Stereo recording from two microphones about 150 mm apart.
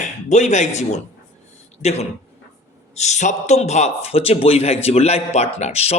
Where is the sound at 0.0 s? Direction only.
50° left (ahead or behind).